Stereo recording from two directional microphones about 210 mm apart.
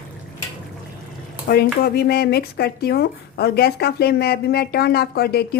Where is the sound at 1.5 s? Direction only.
50° left (ahead or behind).